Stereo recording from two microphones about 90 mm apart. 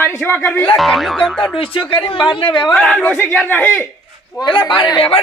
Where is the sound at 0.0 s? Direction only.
25° left (ahead or behind).